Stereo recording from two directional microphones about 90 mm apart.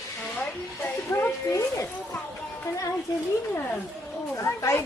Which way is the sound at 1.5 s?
35° left (ahead or behind).